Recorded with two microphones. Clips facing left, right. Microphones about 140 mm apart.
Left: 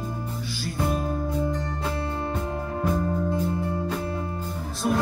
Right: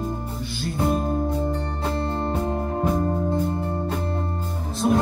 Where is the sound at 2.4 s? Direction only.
35° right (ahead or behind).